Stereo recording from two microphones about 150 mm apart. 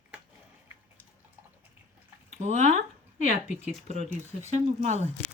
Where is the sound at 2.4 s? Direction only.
50° right (ahead or behind).